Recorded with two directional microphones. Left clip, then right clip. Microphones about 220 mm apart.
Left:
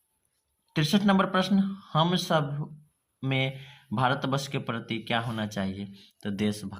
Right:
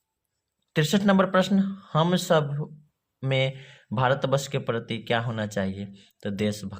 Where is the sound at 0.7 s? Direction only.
55° right (ahead or behind).